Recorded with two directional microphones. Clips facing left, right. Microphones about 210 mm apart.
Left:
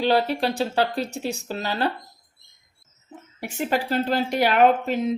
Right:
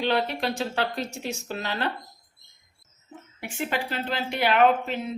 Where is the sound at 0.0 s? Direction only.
35° left (ahead or behind).